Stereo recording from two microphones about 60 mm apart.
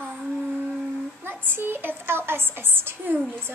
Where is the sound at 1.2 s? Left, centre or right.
Right.